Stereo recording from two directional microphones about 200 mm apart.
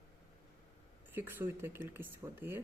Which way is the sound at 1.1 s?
10° right (ahead or behind).